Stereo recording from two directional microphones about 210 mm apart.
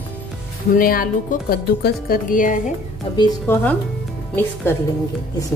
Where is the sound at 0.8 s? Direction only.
40° left (ahead or behind).